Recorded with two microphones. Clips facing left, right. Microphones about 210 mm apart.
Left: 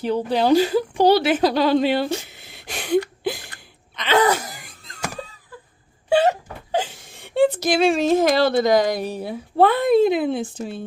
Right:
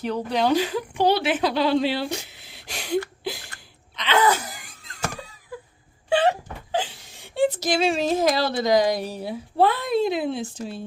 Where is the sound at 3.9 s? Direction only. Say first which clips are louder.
Left 3 dB; 40° left (ahead or behind).